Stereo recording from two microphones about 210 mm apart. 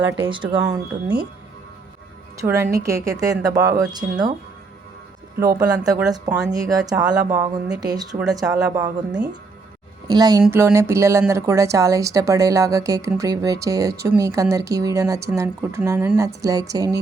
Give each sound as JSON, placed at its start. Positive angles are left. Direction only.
{"t": 0.3, "sound": "speech", "side_deg": -25}
{"t": 2.4, "sound": "speech", "side_deg": -15}
{"t": 5.5, "sound": "speech", "side_deg": -15}
{"t": 8.2, "sound": "speech", "side_deg": 0}
{"t": 8.4, "sound": "a woman's voice", "side_deg": -15}